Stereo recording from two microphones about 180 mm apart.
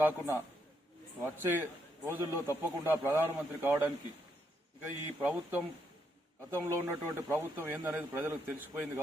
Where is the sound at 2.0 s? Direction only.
15° right (ahead or behind).